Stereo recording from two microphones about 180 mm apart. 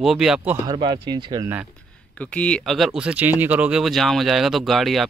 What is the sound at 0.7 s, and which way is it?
Speech, 25° right (ahead or behind).